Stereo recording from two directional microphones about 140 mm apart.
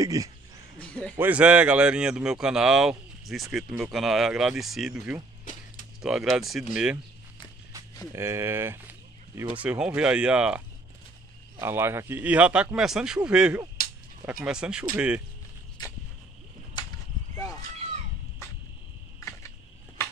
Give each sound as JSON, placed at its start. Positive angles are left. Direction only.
{"t": 0.0, "sound": "speech", "side_deg": -25}
{"t": 0.7, "sound": "speech", "side_deg": 10}
{"t": 1.1, "sound": "speech", "side_deg": -10}
{"t": 8.1, "sound": "speech", "side_deg": -20}
{"t": 11.6, "sound": "speech", "side_deg": -15}
{"t": 16.8, "sound": "a sound", "side_deg": 35}
{"t": 19.1, "sound": "a sound", "side_deg": 20}